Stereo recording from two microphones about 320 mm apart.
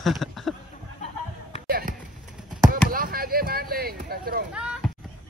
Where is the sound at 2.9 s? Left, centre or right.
Right.